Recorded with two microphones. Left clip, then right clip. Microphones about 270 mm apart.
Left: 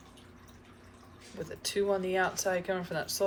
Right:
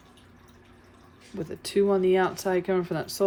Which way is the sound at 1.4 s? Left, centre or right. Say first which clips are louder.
Right 7 dB; right.